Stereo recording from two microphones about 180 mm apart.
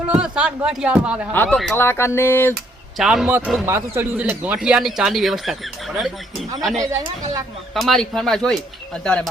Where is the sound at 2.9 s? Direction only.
Centre (ahead or behind).